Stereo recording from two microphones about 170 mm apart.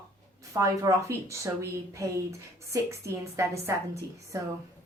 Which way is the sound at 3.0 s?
15° right (ahead or behind).